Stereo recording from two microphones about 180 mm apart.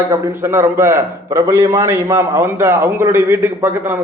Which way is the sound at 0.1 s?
15° right (ahead or behind).